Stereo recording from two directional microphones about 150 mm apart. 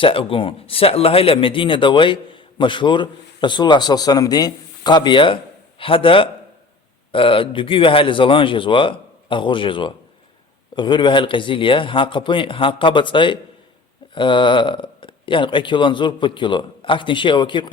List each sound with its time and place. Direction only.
0.0 s speech: 35° left (ahead or behind)